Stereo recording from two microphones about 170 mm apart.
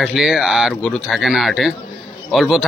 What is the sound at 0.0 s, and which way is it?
Speech, centre (ahead or behind).